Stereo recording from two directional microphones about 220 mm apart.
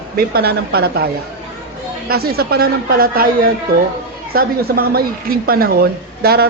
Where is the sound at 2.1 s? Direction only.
45° right (ahead or behind).